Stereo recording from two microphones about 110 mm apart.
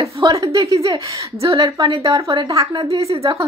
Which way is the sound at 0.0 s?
30° right (ahead or behind).